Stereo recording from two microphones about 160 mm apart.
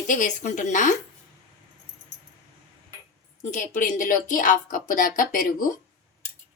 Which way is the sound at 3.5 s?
55° left (ahead or behind).